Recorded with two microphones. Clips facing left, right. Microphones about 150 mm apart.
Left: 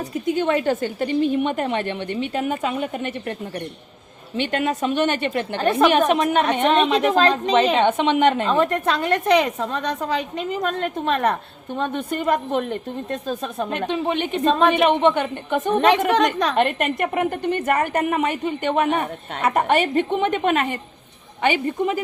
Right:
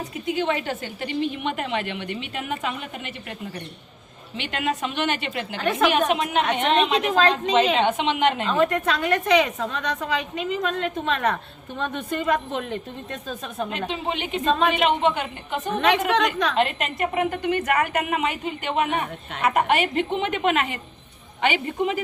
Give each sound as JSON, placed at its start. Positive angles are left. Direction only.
{"t": 0.0, "sound": "a woman's voice", "side_deg": 45}
{"t": 4.5, "sound": "a woman's voice", "side_deg": 45}
{"t": 13.7, "sound": "a woman's voice", "side_deg": 55}
{"t": 15.7, "sound": "a woman's voice", "side_deg": 40}
{"t": 16.6, "sound": "a woman's voice", "side_deg": 50}